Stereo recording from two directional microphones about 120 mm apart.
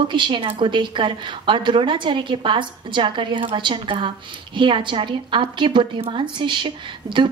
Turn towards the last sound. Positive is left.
turn(degrees=-40)  # may be behind; listen again after turning